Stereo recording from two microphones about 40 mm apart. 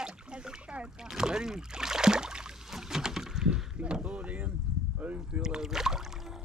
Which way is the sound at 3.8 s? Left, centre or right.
Right.